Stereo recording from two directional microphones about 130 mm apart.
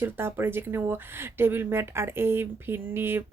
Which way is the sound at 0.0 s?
20° right (ahead or behind).